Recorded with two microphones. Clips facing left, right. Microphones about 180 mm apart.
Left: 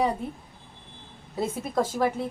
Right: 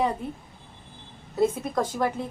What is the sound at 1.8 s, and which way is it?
Speech, 5° left (ahead or behind).